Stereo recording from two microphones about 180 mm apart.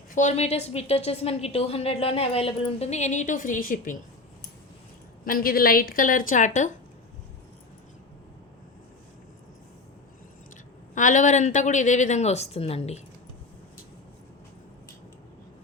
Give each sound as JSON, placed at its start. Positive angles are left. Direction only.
{"t": 0.1, "sound": "a woman's voice", "side_deg": 40}
{"t": 5.2, "sound": "a woman's voice", "side_deg": 50}
{"t": 10.9, "sound": "a woman's voice", "side_deg": 45}